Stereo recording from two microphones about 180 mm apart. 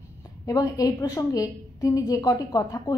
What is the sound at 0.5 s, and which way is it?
A woman's voice, 20° left (ahead or behind).